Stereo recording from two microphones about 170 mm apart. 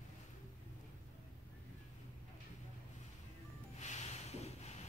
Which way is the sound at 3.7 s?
45° left (ahead or behind).